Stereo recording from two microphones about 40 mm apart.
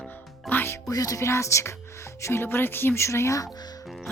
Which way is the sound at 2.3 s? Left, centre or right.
Left.